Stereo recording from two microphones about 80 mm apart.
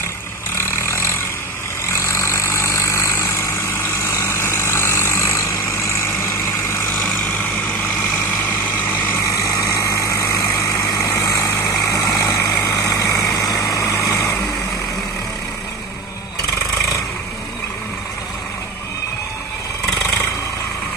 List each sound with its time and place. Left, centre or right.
0.6 s vehicle: left
9.2 s vehicle: left
14.1 s vehicle: centre